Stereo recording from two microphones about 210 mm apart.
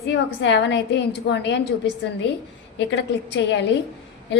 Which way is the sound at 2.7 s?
60° left (ahead or behind).